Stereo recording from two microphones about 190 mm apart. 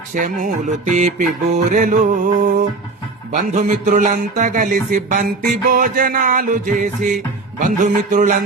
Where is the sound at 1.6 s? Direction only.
40° right (ahead or behind).